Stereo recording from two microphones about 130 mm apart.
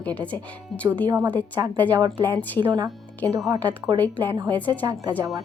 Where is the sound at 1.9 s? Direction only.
25° right (ahead or behind).